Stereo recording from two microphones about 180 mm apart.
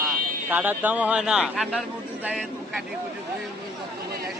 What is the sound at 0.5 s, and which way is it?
Speech, 10° right (ahead or behind).